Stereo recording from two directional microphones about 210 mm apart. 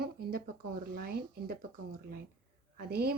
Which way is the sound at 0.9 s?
45° right (ahead or behind).